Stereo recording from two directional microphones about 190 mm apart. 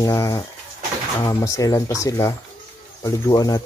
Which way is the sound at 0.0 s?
15° left (ahead or behind).